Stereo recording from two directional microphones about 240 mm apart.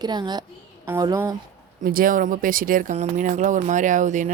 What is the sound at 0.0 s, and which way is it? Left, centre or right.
A woman's voice, centre.